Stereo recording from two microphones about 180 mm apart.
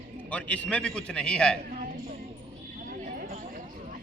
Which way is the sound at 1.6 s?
50° right (ahead or behind).